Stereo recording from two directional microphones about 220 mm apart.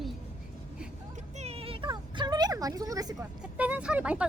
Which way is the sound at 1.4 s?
25° right (ahead or behind).